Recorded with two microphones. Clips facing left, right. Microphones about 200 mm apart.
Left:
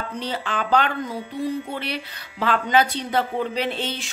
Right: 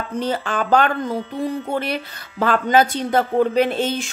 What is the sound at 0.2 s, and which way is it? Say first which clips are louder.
Speech: right 6 dB; 45° right (ahead or behind).